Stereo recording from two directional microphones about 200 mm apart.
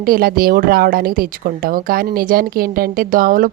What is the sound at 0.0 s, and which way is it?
A woman's voice, 45° right (ahead or behind).